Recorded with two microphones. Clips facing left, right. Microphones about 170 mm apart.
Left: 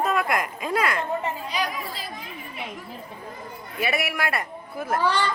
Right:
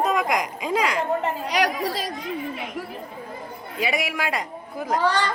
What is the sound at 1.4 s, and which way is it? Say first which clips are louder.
Speech: right 6 dB; 85° right.